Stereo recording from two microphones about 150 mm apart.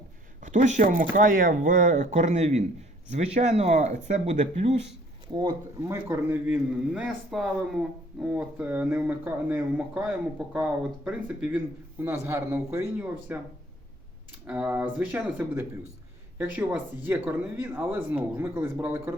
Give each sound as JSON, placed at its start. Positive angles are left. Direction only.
{"t": 0.4, "sound": "speech", "side_deg": -55}
{"t": 5.3, "sound": "speech", "side_deg": -30}
{"t": 5.9, "sound": "speech", "side_deg": -15}
{"t": 14.4, "sound": "speech", "side_deg": -10}